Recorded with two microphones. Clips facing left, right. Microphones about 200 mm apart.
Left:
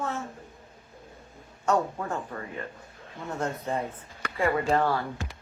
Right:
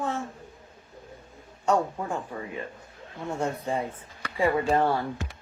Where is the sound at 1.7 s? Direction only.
10° right (ahead or behind).